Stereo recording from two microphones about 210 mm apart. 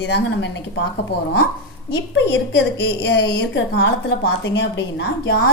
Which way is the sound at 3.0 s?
55° left (ahead or behind).